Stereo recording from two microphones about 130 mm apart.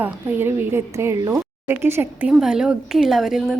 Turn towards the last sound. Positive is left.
turn(degrees=-5)  # may be behind; listen again after turning